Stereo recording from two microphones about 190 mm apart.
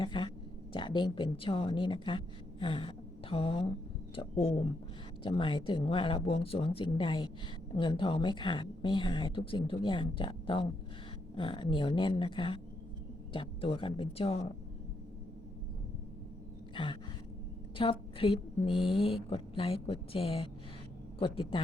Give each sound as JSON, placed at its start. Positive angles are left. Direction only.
{"t": 0.0, "sound": "a woman's voice", "side_deg": 25}
{"t": 16.7, "sound": "a sound", "side_deg": 25}
{"t": 17.7, "sound": "a woman's voice", "side_deg": 25}